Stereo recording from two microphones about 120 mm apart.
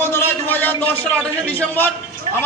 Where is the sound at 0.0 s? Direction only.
20° left (ahead or behind).